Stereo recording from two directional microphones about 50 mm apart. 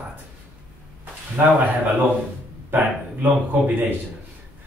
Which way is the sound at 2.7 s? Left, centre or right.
Right.